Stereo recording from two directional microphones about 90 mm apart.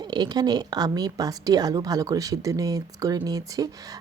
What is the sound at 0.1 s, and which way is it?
Speech, 50° right (ahead or behind).